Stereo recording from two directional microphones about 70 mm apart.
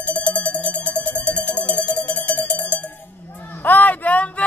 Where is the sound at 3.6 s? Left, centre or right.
Left.